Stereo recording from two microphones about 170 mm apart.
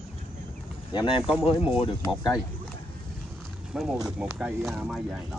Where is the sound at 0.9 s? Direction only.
30° left (ahead or behind).